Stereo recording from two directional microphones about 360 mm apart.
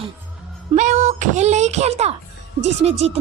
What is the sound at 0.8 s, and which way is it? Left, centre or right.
Speech, right.